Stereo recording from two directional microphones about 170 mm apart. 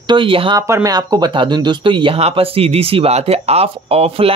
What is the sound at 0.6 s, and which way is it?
Speech, 15° right (ahead or behind).